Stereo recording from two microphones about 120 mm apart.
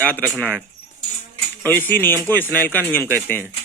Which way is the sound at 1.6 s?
15° left (ahead or behind).